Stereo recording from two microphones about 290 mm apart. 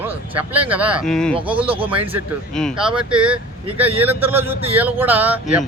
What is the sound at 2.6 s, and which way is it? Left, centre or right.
Speech, centre.